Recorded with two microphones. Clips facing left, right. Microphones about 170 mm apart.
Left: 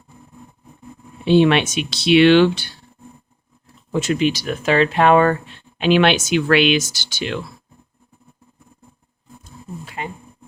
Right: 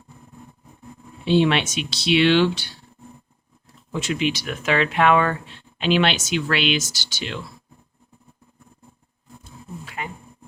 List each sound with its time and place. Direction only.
1.2 s speech: 55° left (ahead or behind)
3.9 s speech: 45° left (ahead or behind)
5.8 s speech: 55° left (ahead or behind)
10.0 s roar: 30° left (ahead or behind)